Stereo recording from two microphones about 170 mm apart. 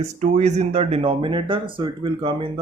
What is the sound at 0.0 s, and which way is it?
Speech, 40° right (ahead or behind).